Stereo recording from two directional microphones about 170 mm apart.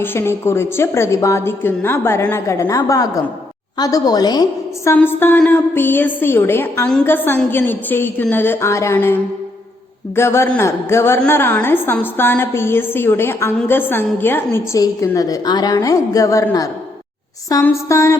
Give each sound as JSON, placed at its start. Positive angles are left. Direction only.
{"t": 0.0, "sound": "a woman's voice", "side_deg": 15}
{"t": 4.9, "sound": "a woman's voice", "side_deg": 10}